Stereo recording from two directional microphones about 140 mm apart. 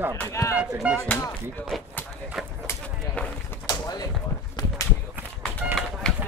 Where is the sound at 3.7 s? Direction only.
30° left (ahead or behind).